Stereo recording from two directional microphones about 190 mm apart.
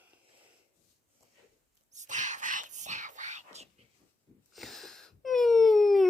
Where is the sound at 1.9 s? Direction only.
40° right (ahead or behind).